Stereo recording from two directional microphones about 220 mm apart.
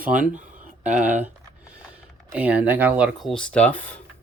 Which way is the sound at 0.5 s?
35° right (ahead or behind).